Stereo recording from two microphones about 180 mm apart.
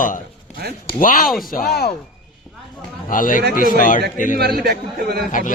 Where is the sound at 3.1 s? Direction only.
50° left (ahead or behind).